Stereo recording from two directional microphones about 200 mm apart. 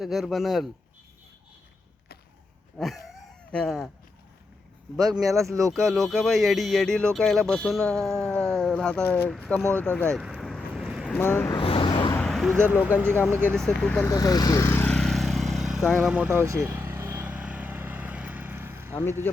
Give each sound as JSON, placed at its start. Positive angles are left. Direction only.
{"t": 0.0, "sound": "speech", "side_deg": 0}
{"t": 2.7, "sound": "a sound", "side_deg": 0}
{"t": 4.9, "sound": "speech", "side_deg": 0}
{"t": 9.3, "sound": "vehicle", "side_deg": 5}
{"t": 11.2, "sound": "speech", "side_deg": 10}
{"t": 11.5, "sound": "vehicle", "side_deg": 25}
{"t": 12.1, "sound": "a sound", "side_deg": 5}
{"t": 12.5, "sound": "speech", "side_deg": -10}
{"t": 13.5, "sound": "speech", "side_deg": 5}
{"t": 14.1, "sound": "vehicle", "side_deg": 20}